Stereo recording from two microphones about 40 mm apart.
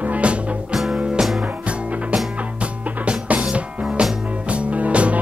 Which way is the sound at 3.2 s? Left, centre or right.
Right.